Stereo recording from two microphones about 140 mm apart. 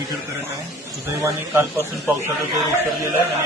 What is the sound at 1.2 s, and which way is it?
Speech, 20° right (ahead or behind).